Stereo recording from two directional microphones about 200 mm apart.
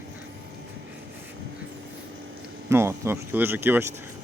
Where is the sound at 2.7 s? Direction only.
15° right (ahead or behind).